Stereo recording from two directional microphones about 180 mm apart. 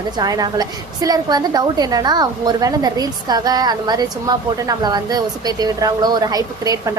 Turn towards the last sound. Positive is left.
turn(degrees=-20)  # may be behind; listen again after turning